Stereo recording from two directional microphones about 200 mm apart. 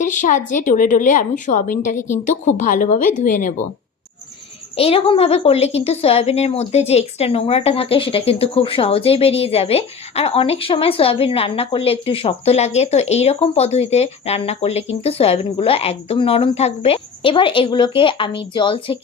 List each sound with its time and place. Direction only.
0.0 s a woman's voice: 40° left (ahead or behind)
4.8 s a woman's voice: 30° left (ahead or behind)